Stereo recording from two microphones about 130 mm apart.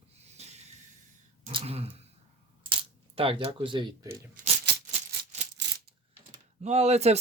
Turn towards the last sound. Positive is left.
turn(degrees=-55)  # may be behind; listen again after turning